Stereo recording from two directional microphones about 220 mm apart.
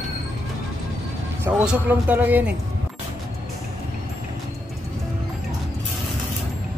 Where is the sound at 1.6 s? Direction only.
5° right (ahead or behind).